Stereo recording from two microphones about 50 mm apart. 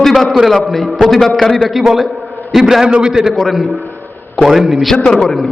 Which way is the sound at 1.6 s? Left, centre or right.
Centre.